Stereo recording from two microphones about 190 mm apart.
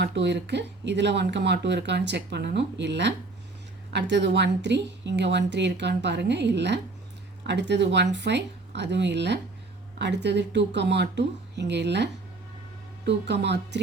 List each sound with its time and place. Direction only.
0.0 s speech: 65° right (ahead or behind)
13.1 s speech: 65° right (ahead or behind)